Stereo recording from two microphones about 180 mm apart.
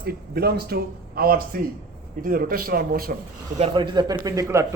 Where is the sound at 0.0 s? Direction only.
60° right (ahead or behind).